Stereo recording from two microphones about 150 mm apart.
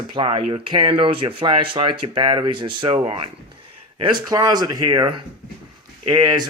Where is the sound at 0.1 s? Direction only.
35° right (ahead or behind).